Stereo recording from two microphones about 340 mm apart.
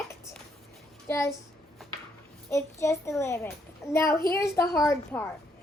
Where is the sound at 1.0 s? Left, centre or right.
Centre.